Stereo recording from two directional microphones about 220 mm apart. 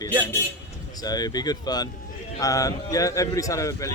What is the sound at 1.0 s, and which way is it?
A man's voice, 15° left (ahead or behind).